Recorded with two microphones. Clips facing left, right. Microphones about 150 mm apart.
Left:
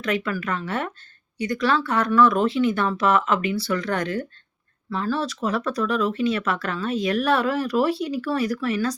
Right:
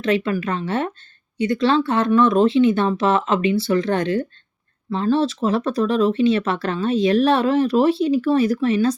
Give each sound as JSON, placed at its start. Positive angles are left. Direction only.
{"t": 0.0, "sound": "speech", "side_deg": -25}